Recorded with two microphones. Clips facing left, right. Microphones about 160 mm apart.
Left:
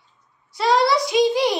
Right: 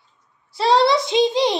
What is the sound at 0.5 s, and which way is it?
A woman's voice, 30° right (ahead or behind).